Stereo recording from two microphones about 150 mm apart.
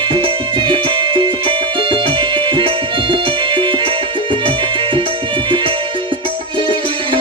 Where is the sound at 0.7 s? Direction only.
35° right (ahead or behind).